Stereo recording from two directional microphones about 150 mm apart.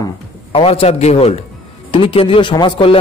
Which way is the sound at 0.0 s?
40° left (ahead or behind).